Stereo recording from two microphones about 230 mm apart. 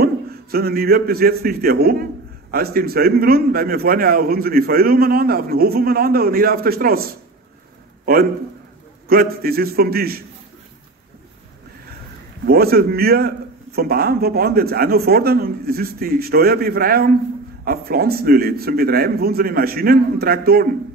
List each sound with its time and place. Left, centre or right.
0.0 s a man's voice: right
12.4 s a man's voice: right